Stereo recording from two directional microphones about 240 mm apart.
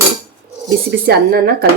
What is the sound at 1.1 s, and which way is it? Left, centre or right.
Speech, right.